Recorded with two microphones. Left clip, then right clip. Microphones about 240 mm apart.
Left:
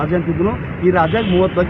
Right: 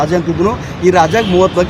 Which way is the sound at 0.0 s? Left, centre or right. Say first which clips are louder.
Right 5 dB; right.